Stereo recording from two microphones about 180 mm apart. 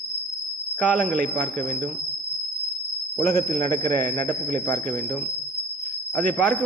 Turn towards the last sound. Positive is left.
turn(degrees=5)  # may be behind; listen again after turning